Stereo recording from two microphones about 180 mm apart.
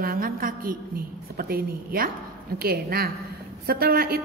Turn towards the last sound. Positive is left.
turn(degrees=-55)  # may be behind; listen again after turning